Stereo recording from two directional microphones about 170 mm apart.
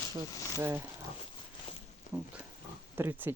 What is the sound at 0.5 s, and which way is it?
Speech, 15° right (ahead or behind).